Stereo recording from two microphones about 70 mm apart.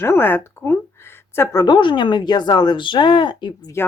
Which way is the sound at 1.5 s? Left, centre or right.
Left.